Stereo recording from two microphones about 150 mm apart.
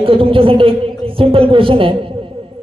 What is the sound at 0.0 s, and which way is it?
A woman's voice, 35° right (ahead or behind).